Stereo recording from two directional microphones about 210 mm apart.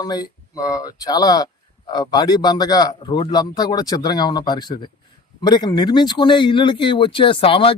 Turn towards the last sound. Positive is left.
turn(degrees=25)  # may be behind; listen again after turning